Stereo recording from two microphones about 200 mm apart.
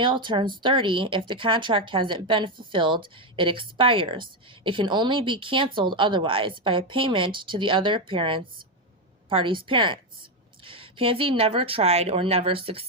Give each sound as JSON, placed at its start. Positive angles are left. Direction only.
{"t": 0.0, "sound": "speech", "side_deg": -25}